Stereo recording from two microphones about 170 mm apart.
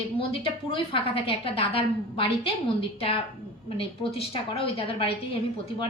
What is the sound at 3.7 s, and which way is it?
A woman's voice, 35° left (ahead or behind).